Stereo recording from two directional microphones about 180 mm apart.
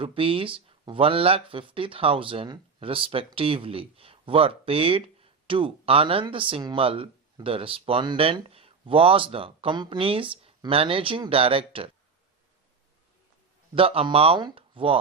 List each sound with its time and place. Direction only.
0.0 s speech: 30° right (ahead or behind)
13.7 s speech: 30° right (ahead or behind)